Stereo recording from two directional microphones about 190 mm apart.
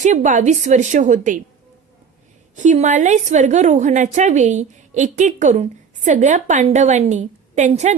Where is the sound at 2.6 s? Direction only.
40° right (ahead or behind).